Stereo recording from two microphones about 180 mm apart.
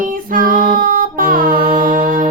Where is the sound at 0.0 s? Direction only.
50° right (ahead or behind).